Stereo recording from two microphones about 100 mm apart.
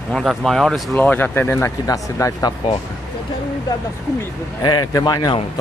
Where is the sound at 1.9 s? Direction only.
35° left (ahead or behind).